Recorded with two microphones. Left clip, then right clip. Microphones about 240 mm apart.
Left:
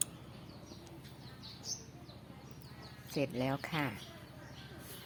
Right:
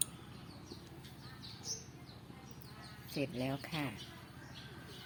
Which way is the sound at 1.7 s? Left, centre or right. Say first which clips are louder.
Left 1 dB; centre.